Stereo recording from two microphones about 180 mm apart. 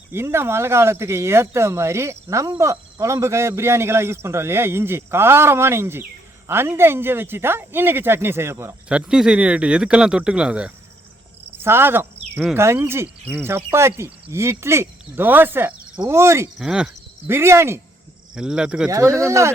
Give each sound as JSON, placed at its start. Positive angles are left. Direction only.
{"t": 0.1, "sound": "speech", "side_deg": -15}
{"t": 11.5, "sound": "cricket", "side_deg": -10}
{"t": 12.4, "sound": "speech", "side_deg": -10}
{"t": 16.6, "sound": "speech", "side_deg": -5}
{"t": 18.9, "sound": "speech", "side_deg": -15}